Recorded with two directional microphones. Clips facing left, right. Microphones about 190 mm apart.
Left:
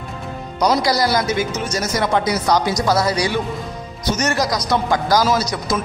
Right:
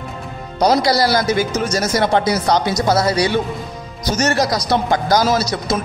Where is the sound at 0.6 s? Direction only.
30° right (ahead or behind).